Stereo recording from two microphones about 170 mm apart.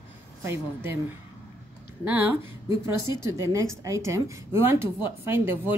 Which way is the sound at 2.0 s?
10° right (ahead or behind).